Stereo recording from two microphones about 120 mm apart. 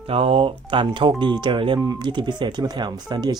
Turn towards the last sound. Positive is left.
turn(degrees=-35)  # may be behind; listen again after turning